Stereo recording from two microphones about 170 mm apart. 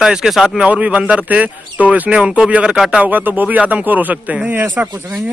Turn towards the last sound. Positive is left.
turn(degrees=-15)  # may be behind; listen again after turning